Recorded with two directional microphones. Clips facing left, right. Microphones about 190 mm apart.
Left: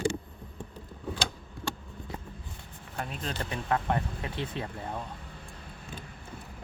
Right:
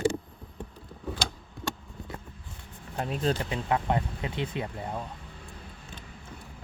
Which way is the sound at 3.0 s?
35° right (ahead or behind).